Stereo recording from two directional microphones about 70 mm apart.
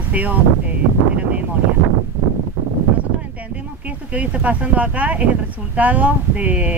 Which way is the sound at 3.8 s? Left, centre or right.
Right.